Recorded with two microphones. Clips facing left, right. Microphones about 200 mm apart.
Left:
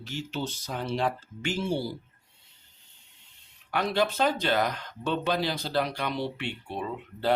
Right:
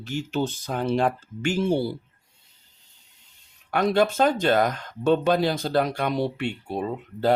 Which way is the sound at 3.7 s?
45° right (ahead or behind).